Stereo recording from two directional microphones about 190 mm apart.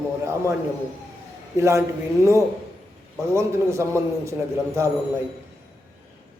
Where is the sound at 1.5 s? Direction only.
15° right (ahead or behind).